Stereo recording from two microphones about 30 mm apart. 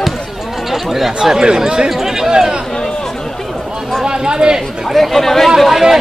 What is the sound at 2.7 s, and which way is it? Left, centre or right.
Chatter, left.